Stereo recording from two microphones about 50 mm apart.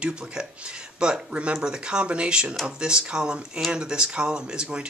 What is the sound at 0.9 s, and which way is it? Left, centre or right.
A man's voice, centre.